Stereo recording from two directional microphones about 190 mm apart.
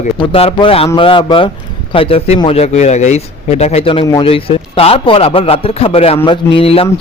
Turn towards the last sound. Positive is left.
turn(degrees=30)  # may be behind; listen again after turning